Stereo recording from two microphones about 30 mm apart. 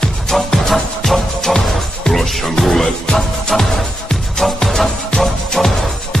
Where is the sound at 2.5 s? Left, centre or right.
Centre.